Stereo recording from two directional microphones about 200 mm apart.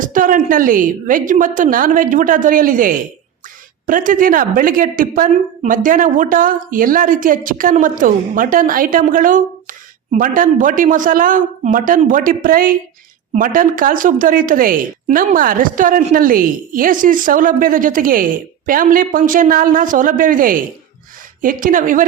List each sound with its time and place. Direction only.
0.0 s a woman's voice: 40° right (ahead or behind)